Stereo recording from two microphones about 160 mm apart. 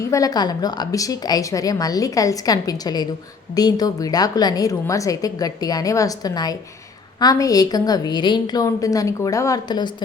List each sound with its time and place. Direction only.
0.1 s a woman's voice: 20° left (ahead or behind)